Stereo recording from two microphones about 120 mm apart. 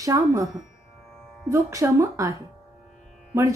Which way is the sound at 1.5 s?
25° right (ahead or behind).